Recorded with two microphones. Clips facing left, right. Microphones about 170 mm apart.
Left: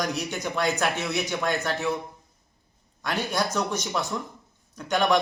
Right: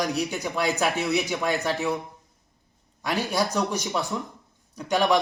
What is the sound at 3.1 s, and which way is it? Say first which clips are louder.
Speech: right 2 dB; 40° right (ahead or behind).